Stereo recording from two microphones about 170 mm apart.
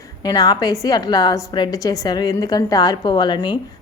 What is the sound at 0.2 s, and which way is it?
A woman's voice, 20° left (ahead or behind).